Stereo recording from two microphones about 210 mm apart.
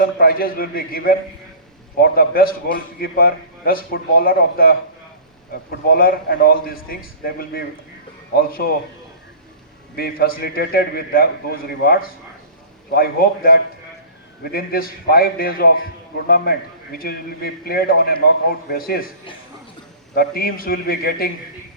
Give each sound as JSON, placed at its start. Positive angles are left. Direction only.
{"t": 0.0, "sound": "a man's voice", "side_deg": 45}
{"t": 5.9, "sound": "a man's voice", "side_deg": 45}
{"t": 8.4, "sound": "a man's voice", "side_deg": 45}
{"t": 9.9, "sound": "a man's voice", "side_deg": 45}
{"t": 20.1, "sound": "a man's voice", "side_deg": 45}